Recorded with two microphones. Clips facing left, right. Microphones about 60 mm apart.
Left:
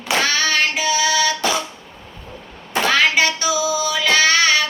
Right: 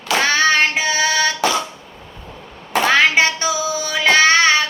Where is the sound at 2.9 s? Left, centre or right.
Right.